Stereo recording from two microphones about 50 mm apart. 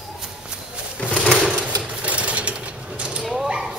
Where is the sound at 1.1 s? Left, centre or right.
Centre.